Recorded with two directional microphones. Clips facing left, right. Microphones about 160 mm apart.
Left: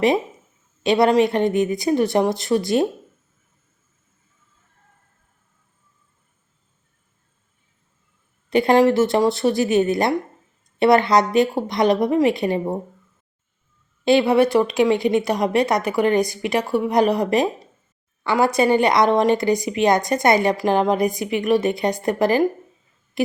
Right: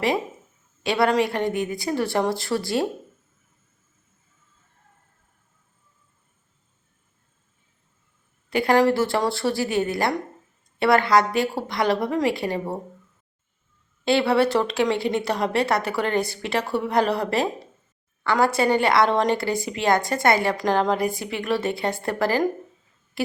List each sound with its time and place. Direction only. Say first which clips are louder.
0.8 s a woman's voice: left 5 dB; 20° left (ahead or behind)
8.4 s a woman's voice: left 4 dB; 20° left (ahead or behind)
14.0 s speech: left 4 dB; 15° left (ahead or behind)
23.2 s owl: left 5 dB; 20° left (ahead or behind)